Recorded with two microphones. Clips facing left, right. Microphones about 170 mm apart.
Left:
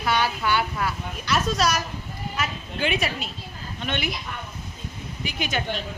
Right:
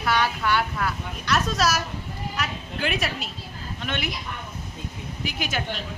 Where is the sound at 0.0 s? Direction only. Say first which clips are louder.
Even; centre (ahead or behind).